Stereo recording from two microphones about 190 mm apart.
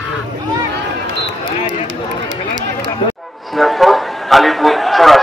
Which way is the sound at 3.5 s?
Centre (ahead or behind).